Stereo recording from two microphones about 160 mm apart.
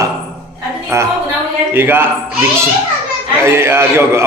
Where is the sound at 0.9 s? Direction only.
15° right (ahead or behind).